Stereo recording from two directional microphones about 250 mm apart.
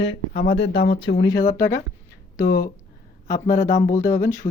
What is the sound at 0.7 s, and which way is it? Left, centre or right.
Speech, left.